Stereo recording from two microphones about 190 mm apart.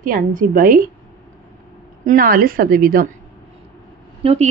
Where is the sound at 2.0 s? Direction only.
50° right (ahead or behind).